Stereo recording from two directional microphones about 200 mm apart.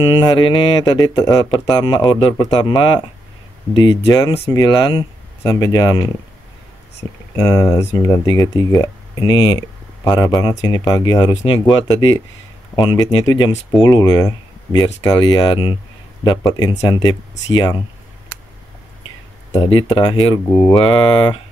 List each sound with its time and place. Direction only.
0.0 s speech: 20° left (ahead or behind)
19.5 s speech: 25° left (ahead or behind)